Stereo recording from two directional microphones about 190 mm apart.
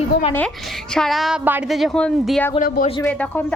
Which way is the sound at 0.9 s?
Centre (ahead or behind).